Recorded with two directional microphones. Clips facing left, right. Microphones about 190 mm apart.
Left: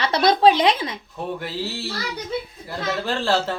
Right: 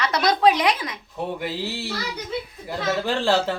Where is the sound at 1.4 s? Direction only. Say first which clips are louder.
Right 1 dB; 15° right (ahead or behind).